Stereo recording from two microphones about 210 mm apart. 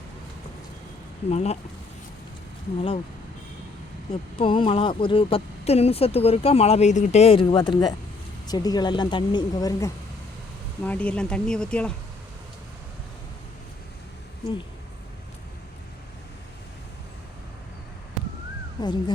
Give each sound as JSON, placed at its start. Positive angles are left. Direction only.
{"t": 1.3, "sound": "speech", "side_deg": 30}
{"t": 4.1, "sound": "speech", "side_deg": 25}
{"t": 10.8, "sound": "speech", "side_deg": 5}
{"t": 18.2, "sound": "a sound", "side_deg": 0}
{"t": 18.8, "sound": "speech", "side_deg": 20}